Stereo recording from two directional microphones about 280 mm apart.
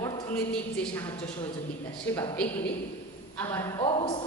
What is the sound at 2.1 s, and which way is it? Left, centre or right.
A woman's voice, centre.